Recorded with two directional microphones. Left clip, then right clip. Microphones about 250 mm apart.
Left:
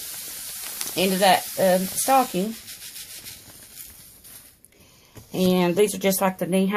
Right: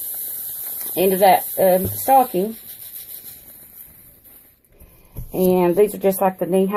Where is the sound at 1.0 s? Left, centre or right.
Left.